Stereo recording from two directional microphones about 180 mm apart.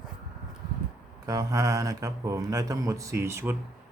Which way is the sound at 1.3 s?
20° right (ahead or behind).